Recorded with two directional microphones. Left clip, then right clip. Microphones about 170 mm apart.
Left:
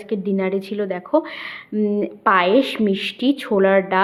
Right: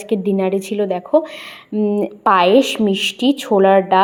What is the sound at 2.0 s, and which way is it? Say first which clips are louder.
Speech: right 3 dB; 15° right (ahead or behind).